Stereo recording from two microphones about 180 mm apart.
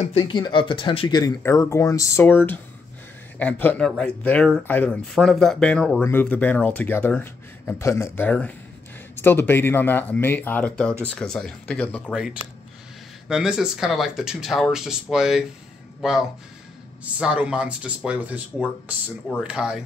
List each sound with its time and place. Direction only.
0.0 s speech: 30° left (ahead or behind); by 12.2 s 5° left (ahead or behind)
13.3 s speech: 5° right (ahead or behind)
19.4 s speech: 5° right (ahead or behind)